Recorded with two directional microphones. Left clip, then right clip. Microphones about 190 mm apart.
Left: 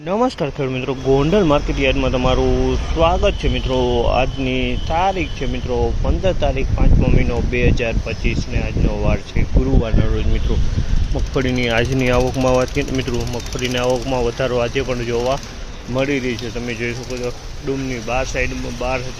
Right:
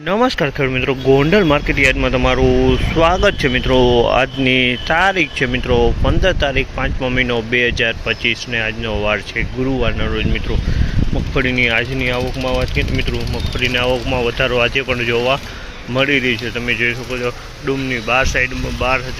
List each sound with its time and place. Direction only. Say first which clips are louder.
0.1 s speech: right 3 dB; 5° left (ahead or behind)
11.3 s speech: right 3 dB; 10° left (ahead or behind)
11.9 s speech: left 2 dB; 25° left (ahead or behind)
13.7 s speech: even; 15° left (ahead or behind)